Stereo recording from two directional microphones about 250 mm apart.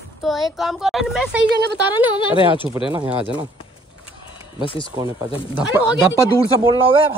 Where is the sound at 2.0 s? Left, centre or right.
Left.